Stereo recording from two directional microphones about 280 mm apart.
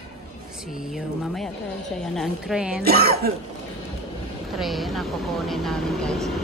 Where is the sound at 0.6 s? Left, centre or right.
Centre.